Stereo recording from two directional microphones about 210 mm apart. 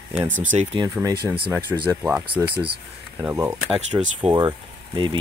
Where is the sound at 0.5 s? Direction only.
25° right (ahead or behind).